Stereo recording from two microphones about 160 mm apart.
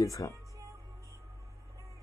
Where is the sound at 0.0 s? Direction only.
20° left (ahead or behind).